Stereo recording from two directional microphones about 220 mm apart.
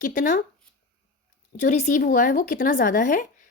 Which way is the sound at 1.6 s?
35° left (ahead or behind).